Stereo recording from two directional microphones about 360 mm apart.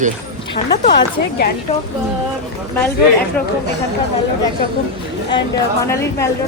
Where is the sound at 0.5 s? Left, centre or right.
Centre.